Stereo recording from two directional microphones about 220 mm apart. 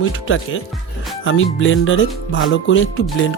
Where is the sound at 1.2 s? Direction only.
60° left (ahead or behind).